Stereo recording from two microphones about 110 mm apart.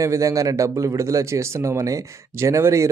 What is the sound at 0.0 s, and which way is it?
Speech, 30° right (ahead or behind).